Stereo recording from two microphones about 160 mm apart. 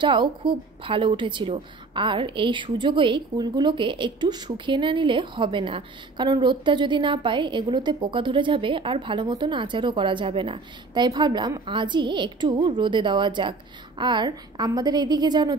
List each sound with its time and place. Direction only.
0.0 s a woman's voice: 30° right (ahead or behind)